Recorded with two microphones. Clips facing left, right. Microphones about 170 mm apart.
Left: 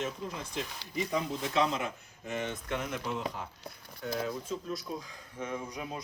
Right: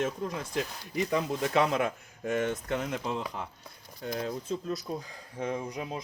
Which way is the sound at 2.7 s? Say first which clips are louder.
Right 3 dB; 35° right (ahead or behind).